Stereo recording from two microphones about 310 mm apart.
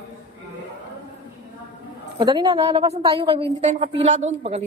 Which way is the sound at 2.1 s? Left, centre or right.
Centre.